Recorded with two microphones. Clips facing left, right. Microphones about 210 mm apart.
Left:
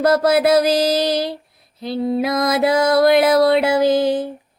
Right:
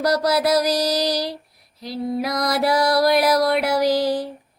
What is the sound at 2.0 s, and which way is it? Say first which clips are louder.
Music: left 4 dB; 25° left (ahead or behind).